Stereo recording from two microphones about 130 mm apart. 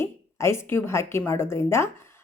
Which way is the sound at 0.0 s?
20° left (ahead or behind).